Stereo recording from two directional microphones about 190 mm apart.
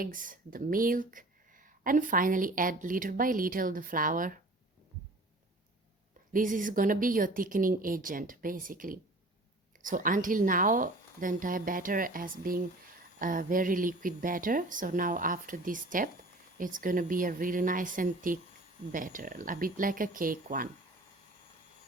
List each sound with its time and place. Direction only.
0.0 s speech: 45° right (ahead or behind)
6.3 s speech: 45° right (ahead or behind)